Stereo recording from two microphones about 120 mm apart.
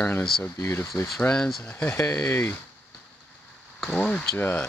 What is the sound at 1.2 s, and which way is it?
Speech, 5° left (ahead or behind).